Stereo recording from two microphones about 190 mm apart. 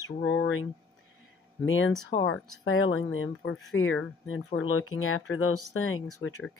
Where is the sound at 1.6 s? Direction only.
90° left.